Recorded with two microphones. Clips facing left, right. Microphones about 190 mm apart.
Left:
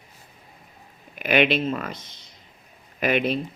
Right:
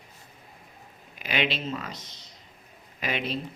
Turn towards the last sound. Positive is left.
turn(degrees=55)  # may be behind; listen again after turning